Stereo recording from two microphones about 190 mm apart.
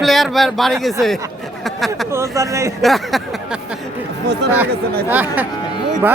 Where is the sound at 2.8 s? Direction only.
Centre (ahead or behind).